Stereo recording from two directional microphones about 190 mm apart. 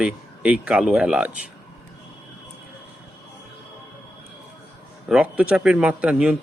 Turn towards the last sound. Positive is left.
turn(degrees=-5)  # may be behind; listen again after turning